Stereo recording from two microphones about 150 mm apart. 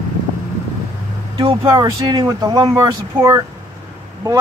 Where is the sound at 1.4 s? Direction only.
35° right (ahead or behind).